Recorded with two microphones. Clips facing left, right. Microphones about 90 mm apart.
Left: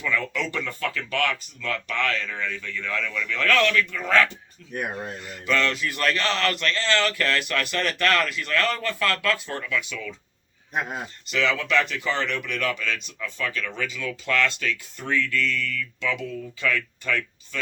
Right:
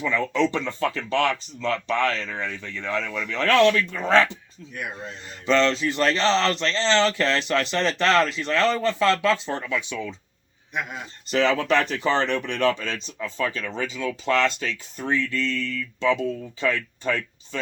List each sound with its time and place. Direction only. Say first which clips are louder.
0.0 s speech: right 5 dB; 25° right (ahead or behind)
4.7 s speech: left 4 dB; 40° left (ahead or behind)
5.3 s speech: right 5 dB; 25° right (ahead or behind)
10.8 s speech: left 2 dB; 40° left (ahead or behind)
11.3 s speech: right 4 dB; 35° right (ahead or behind)